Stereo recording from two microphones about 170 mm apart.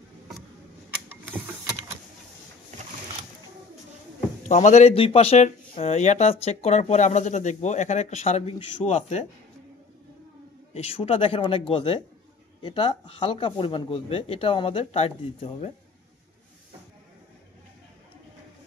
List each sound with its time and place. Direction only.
4.5 s speech: 45° left (ahead or behind)
10.7 s speech: 35° left (ahead or behind)